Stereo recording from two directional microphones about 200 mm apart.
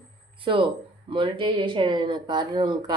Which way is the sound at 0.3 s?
25° right (ahead or behind).